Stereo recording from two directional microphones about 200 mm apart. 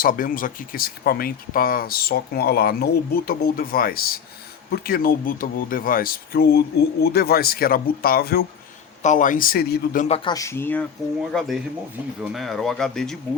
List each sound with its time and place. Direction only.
0.0 s speech: 45° left (ahead or behind)
9.0 s a man's voice: 35° left (ahead or behind)
10.1 s speech: 20° left (ahead or behind); by 13.1 s 5° left (ahead or behind)